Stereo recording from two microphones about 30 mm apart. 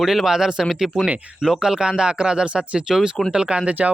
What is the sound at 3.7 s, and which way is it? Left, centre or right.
Speech, right.